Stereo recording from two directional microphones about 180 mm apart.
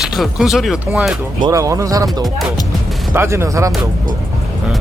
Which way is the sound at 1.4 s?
20° right (ahead or behind).